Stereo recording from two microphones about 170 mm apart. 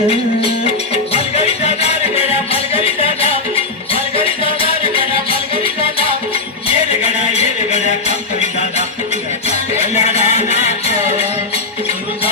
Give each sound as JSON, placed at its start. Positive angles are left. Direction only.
{"t": 1.1, "sound": "music", "side_deg": 40}
{"t": 7.0, "sound": "music", "side_deg": 40}
{"t": 9.5, "sound": "music", "side_deg": 40}